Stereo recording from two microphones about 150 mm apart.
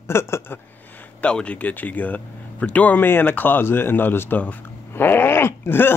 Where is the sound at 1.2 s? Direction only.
10° left (ahead or behind).